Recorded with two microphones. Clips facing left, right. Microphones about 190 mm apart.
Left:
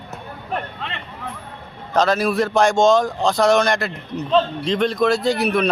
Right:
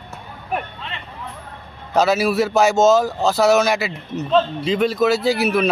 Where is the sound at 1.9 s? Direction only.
10° right (ahead or behind).